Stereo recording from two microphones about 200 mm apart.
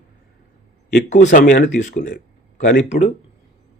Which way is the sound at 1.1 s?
35° left (ahead or behind).